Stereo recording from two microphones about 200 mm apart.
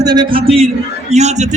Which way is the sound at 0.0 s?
20° right (ahead or behind).